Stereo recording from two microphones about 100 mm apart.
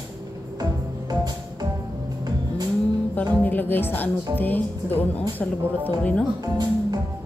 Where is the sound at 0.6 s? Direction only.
40° right (ahead or behind).